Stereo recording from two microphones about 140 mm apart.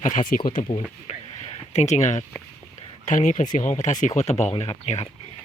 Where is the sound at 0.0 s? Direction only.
65° left (ahead or behind).